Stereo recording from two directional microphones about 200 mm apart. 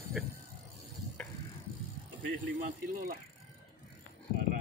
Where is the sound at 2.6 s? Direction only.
45° right (ahead or behind).